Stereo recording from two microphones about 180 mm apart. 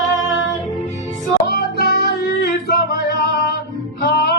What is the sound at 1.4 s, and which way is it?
Music, 55° left (ahead or behind).